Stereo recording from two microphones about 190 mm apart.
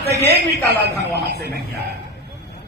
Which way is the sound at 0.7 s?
60° right (ahead or behind).